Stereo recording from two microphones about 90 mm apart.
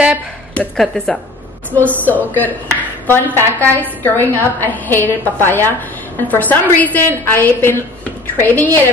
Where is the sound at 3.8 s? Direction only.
20° left (ahead or behind).